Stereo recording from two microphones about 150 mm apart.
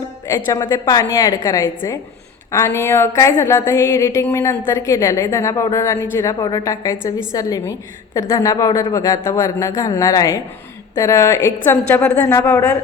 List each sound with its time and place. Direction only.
0.3 s a woman's voice: 20° left (ahead or behind)